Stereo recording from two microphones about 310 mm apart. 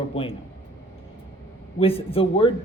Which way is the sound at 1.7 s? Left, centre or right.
Centre.